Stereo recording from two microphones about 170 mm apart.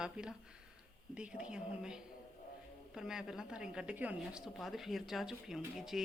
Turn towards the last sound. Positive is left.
turn(degrees=0)  # may be behind; listen again after turning